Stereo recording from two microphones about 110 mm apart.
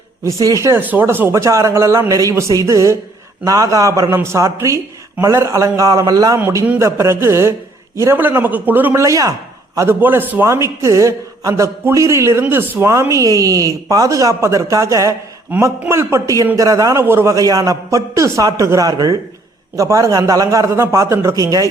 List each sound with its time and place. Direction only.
0.3 s a man's voice: 30° right (ahead or behind)
0.8 s a man's voice: 15° right (ahead or behind)
17.3 s a man's voice: 35° right (ahead or behind)